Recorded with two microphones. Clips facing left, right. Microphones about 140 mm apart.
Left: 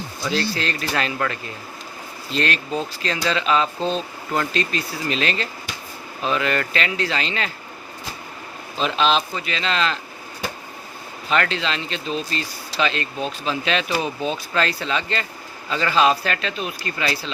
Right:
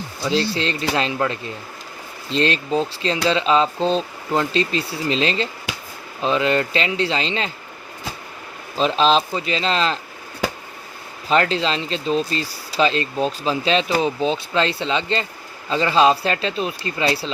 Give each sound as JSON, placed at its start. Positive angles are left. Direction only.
{"t": 0.2, "sound": "speech", "side_deg": -25}
{"t": 8.8, "sound": "speech", "side_deg": -35}
{"t": 11.3, "sound": "speech", "side_deg": -35}